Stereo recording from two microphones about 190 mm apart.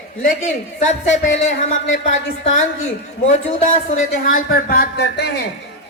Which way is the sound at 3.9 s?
50° left (ahead or behind).